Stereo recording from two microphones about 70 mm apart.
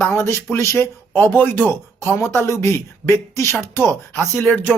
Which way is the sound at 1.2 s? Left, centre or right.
Left.